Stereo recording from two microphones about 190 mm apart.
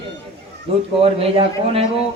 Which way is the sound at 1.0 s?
30° right (ahead or behind).